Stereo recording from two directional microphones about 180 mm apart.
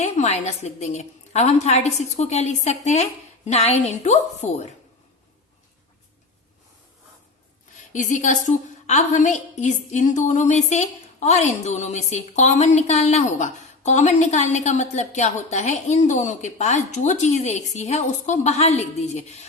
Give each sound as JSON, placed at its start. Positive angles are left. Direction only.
{"t": 0.0, "sound": "a woman's voice", "side_deg": 40}
{"t": 7.9, "sound": "a woman's voice", "side_deg": 45}